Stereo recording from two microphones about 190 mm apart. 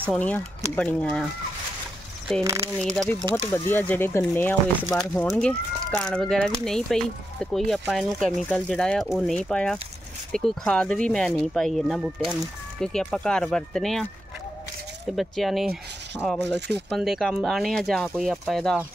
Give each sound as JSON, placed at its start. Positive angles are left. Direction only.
{"t": 0.1, "sound": "speech", "side_deg": 10}
{"t": 2.4, "sound": "speech", "side_deg": -15}
{"t": 3.0, "sound": "speech", "side_deg": 0}
{"t": 15.1, "sound": "speech", "side_deg": 0}
{"t": 16.5, "sound": "speech", "side_deg": -60}
{"t": 16.9, "sound": "speech", "side_deg": 0}